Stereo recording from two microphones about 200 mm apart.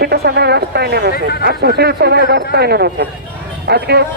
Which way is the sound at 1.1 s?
50° left (ahead or behind).